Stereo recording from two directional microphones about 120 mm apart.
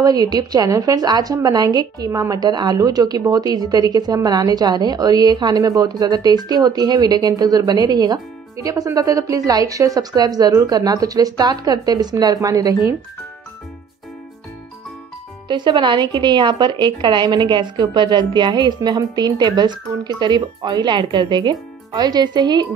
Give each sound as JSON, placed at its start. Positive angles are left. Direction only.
{"t": 0.0, "sound": "a woman's voice", "side_deg": -30}
{"t": 15.4, "sound": "a woman's voice", "side_deg": -40}